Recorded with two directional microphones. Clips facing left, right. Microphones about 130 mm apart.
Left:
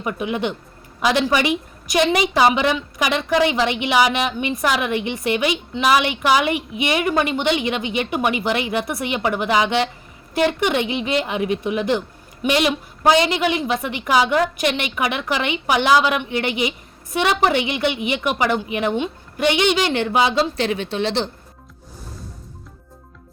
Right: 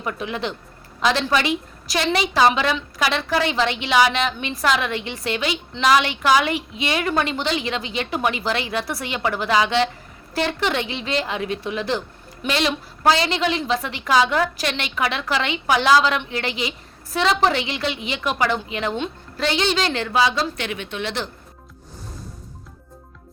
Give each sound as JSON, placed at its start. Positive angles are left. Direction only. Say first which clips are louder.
{"t": 0.0, "sound": "a woman's voice", "louder": "left 4 dB", "side_deg": 15}
{"t": 20.0, "sound": "a woman's voice", "louder": "left 2 dB", "side_deg": 25}